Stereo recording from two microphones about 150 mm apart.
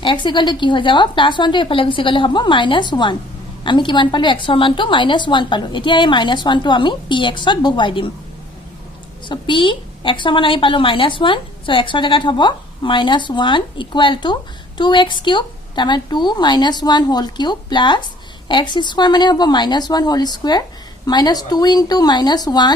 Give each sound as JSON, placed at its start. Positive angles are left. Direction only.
{"t": 0.0, "sound": "a woman's voice", "side_deg": 30}
{"t": 9.3, "sound": "a woman's voice", "side_deg": 35}